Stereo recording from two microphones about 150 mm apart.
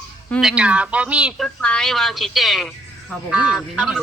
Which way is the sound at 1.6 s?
5° left (ahead or behind).